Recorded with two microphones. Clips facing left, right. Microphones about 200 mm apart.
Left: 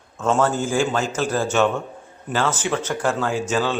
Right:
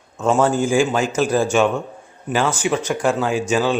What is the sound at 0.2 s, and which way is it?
A man's voice, 15° right (ahead or behind).